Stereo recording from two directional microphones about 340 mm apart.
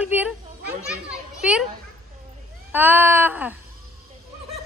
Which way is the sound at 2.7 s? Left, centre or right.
Centre.